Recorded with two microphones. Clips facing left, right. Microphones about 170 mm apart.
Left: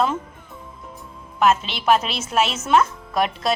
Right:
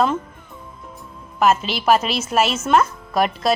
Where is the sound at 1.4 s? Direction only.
5° right (ahead or behind).